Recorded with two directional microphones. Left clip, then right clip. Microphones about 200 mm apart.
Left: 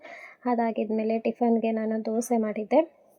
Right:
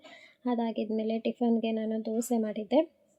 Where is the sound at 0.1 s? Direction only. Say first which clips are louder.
Left 5 dB; 15° left (ahead or behind).